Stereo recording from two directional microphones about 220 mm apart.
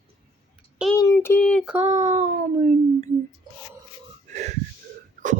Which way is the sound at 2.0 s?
30° right (ahead or behind).